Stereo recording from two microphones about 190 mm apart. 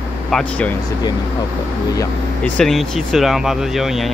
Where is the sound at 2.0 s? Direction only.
5° left (ahead or behind).